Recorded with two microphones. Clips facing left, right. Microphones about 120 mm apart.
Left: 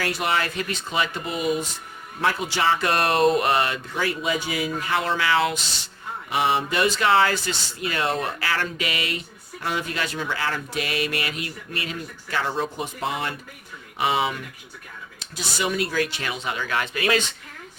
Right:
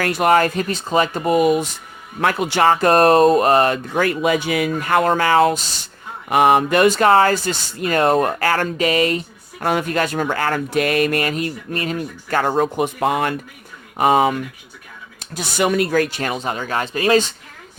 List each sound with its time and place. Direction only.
0.0 s speech: 50° right (ahead or behind)